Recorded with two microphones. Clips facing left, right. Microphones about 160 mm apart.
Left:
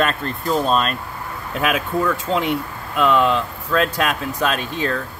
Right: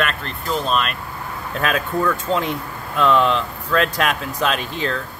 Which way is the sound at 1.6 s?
10° left (ahead or behind).